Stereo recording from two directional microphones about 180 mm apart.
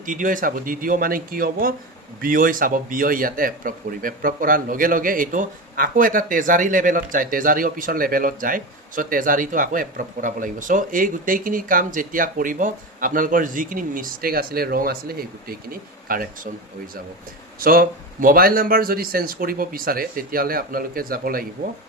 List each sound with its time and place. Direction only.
0.0 s a man's voice: 45° right (ahead or behind)